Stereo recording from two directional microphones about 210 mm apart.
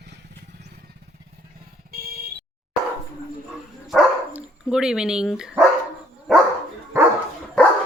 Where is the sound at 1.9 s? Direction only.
45° right (ahead or behind).